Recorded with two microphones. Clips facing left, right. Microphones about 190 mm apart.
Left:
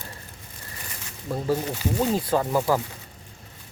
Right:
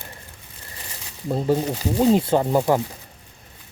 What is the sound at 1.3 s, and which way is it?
Speech, 25° right (ahead or behind).